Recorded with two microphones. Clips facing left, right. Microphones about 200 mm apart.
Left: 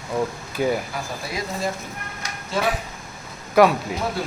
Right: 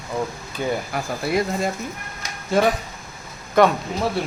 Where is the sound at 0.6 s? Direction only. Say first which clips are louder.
Left 3 dB; 5° left (ahead or behind).